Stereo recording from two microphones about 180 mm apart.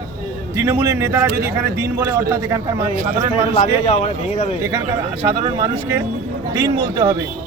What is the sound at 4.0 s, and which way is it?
Speech, 40° left (ahead or behind).